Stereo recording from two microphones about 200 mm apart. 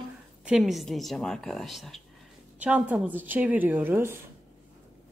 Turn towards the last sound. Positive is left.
turn(degrees=-10)  # may be behind; listen again after turning